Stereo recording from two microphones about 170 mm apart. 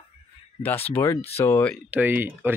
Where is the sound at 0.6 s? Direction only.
10° left (ahead or behind).